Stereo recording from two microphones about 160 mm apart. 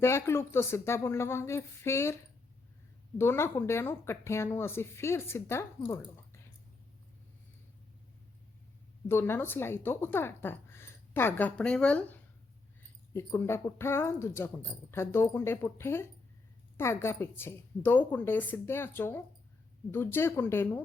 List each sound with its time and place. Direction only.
0.0 s speech: 15° left (ahead or behind)
3.2 s speech: 15° left (ahead or behind)
9.0 s speech: 15° left (ahead or behind)